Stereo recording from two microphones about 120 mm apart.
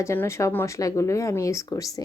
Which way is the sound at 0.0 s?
20° left (ahead or behind).